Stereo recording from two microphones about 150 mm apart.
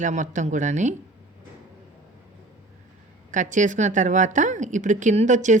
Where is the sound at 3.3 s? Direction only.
55° right (ahead or behind).